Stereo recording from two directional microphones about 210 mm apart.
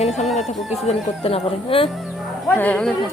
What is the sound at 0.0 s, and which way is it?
Speech, 30° left (ahead or behind).